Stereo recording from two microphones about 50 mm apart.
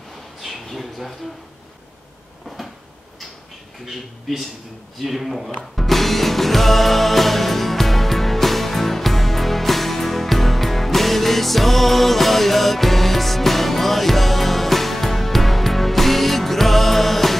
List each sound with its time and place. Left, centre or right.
0.4 s a sound: centre
2.4 s cupboard open or close: centre
3.8 s speech: centre
5.6 s music: centre